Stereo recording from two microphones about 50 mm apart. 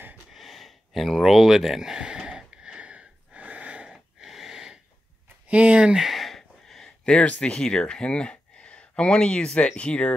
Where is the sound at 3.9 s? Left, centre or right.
Centre.